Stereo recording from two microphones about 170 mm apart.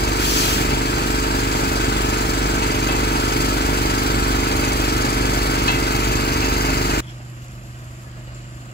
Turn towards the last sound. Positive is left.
turn(degrees=70)  # may be behind; listen again after turning